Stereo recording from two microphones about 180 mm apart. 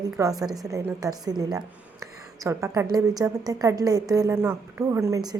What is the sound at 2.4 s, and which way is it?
A woman's voice, 15° right (ahead or behind).